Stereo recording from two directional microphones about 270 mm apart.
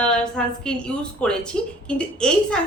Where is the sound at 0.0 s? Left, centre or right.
Centre.